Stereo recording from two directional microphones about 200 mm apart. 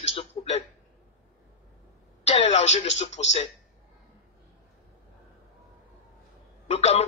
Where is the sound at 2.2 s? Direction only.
30° left (ahead or behind).